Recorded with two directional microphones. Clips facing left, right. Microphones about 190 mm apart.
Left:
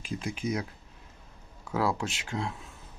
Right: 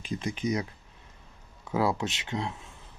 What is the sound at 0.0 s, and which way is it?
Speech, 5° left (ahead or behind).